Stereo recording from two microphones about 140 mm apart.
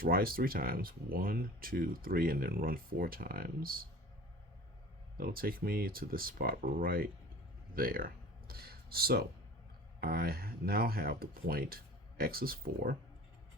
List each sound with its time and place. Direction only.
0.0 s speech: 90° right
5.1 s speech: 90° right
8.4 s a sound: 90° right
10.0 s speech: 90° right